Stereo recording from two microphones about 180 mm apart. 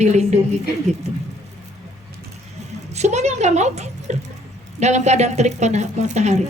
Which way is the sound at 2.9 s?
40° right (ahead or behind).